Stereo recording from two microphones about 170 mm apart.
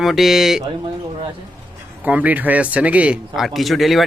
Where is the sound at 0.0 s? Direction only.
Centre (ahead or behind).